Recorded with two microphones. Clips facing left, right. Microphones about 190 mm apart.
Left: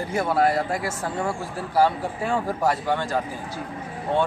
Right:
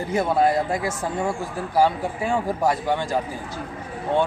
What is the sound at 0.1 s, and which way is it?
A woman's voice, 20° right (ahead or behind).